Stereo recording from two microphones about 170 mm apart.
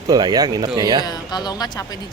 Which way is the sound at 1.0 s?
25° left (ahead or behind).